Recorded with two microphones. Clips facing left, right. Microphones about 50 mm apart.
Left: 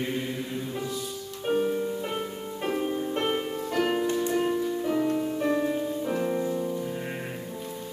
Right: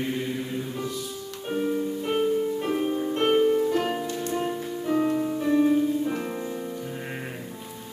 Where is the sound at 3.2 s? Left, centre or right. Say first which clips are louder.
Right 8 dB; centre.